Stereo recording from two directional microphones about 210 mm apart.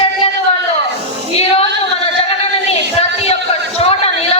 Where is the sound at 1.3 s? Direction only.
30° left (ahead or behind).